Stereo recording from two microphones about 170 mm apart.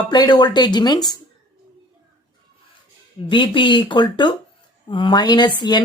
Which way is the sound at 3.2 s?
30° left (ahead or behind).